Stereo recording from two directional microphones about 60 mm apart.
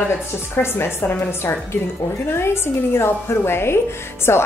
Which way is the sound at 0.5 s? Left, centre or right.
Left.